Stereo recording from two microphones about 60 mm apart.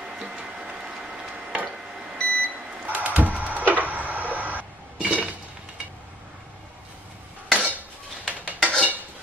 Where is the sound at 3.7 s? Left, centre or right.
Right.